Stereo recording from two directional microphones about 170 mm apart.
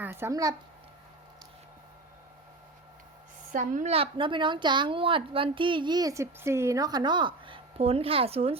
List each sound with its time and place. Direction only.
0.0 s speech: 10° right (ahead or behind)
3.5 s a woman's voice: 50° right (ahead or behind)
3.9 s a woman's voice: 30° right (ahead or behind)